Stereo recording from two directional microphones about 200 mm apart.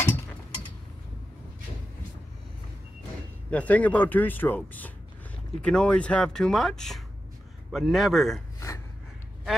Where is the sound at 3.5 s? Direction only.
5° left (ahead or behind).